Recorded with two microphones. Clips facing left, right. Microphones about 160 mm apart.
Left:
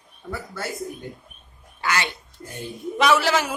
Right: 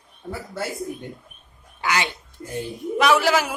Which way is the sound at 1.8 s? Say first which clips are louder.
Right 1 dB; 15° right (ahead or behind).